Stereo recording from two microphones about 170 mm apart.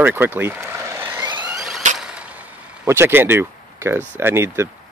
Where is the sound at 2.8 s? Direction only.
15° right (ahead or behind).